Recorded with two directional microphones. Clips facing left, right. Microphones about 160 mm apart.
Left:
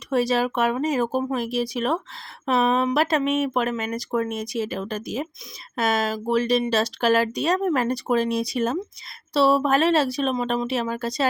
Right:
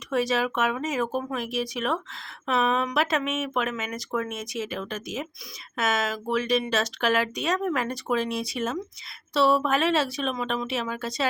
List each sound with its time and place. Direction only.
0.1 s speech: 35° left (ahead or behind)